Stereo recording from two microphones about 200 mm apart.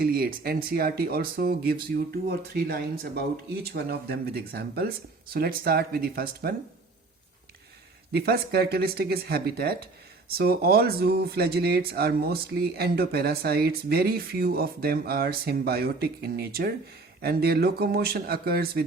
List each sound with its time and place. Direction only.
0.0 s speech: 50° right (ahead or behind)
8.1 s speech: 50° right (ahead or behind)